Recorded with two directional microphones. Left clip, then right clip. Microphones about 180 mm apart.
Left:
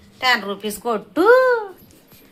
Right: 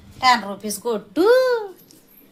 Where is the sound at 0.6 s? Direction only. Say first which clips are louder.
Left 2 dB; 10° right (ahead or behind).